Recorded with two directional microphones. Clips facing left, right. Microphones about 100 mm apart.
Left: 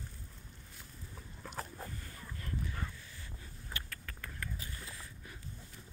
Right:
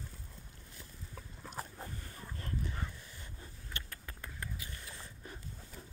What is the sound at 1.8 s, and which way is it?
Dog, 30° right (ahead or behind).